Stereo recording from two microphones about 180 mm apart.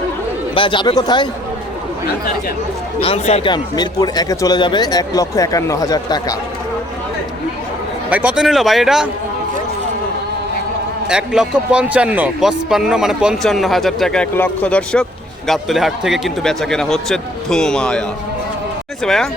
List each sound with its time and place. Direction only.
0.5 s speech: 25° left (ahead or behind)
3.0 s speech: 35° left (ahead or behind)
3.5 s speech: 20° left (ahead or behind)
8.1 s a man's voice: 5° right (ahead or behind)
11.1 s a man's voice: 5° right (ahead or behind)
19.0 s a man's voice: centre (ahead or behind)